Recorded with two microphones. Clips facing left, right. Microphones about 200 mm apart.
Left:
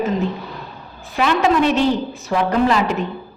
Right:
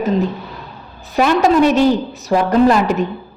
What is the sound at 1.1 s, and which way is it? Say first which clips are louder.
A woman's voice: right 4 dB; 45° right (ahead or behind).